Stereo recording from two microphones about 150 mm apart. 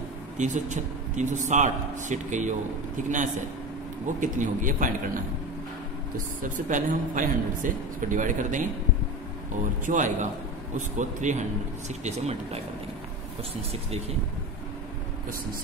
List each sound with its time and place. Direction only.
0.4 s speech: 55° right (ahead or behind)
6.4 s speech: 60° right (ahead or behind)
9.8 s speech: 60° right (ahead or behind)